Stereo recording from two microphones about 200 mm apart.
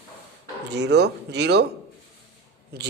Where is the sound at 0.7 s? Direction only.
60° right (ahead or behind).